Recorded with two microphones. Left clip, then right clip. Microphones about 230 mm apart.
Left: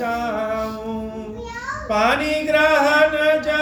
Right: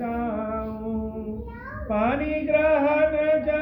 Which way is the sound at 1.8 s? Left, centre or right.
Left.